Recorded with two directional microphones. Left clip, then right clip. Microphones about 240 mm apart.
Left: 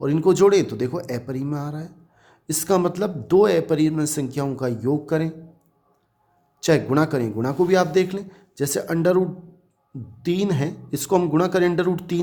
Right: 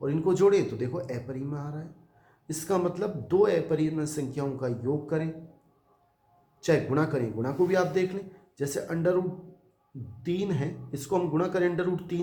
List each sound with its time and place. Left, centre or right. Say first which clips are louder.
0.0 s speech: left 7 dB; left
6.6 s speech: left 6 dB; left
10.2 s speech: left 7 dB; left